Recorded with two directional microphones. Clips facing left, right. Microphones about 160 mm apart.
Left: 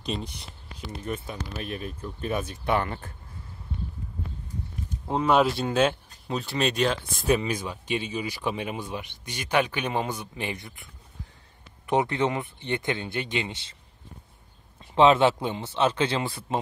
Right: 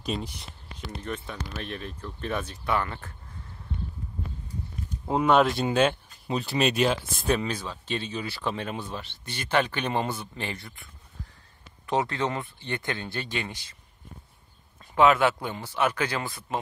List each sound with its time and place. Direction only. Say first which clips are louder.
0.0 s speech: right 1 dB; 5° right (ahead or behind)
2.5 s speech: left 2 dB; 25° left (ahead or behind)
5.0 s speech: right 1 dB; centre (ahead or behind)
7.2 s speech: left 2 dB; 10° left (ahead or behind); by 13.7 s 25° left (ahead or behind)
15.0 s speech: left 2 dB; 25° left (ahead or behind)